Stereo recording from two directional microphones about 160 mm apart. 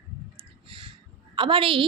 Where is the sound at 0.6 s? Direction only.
35° right (ahead or behind).